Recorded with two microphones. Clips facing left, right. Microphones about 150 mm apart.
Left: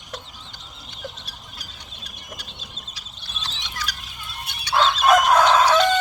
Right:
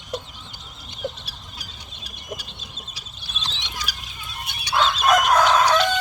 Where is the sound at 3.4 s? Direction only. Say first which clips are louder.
Right 1 dB; 15° right (ahead or behind).